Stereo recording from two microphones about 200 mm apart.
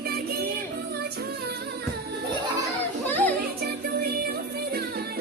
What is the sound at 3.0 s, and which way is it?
Children playing, 10° left (ahead or behind).